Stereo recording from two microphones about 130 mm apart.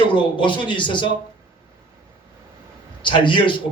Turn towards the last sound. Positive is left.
turn(degrees=40)  # may be behind; listen again after turning